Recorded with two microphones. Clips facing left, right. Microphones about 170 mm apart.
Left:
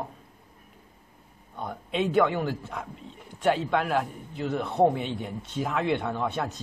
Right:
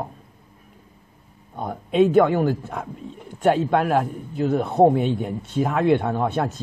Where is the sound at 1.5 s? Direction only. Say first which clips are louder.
Right 10 dB; 45° right (ahead or behind).